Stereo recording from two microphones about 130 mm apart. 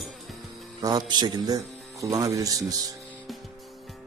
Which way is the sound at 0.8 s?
30° right (ahead or behind).